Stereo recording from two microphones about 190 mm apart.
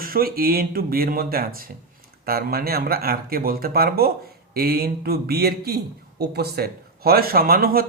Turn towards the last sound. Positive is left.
turn(degrees=-50)  # may be behind; listen again after turning